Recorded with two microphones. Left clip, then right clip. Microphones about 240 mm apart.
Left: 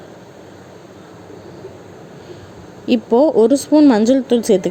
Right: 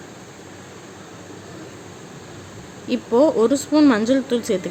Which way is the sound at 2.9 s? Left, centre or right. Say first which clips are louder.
Left 4 dB; centre.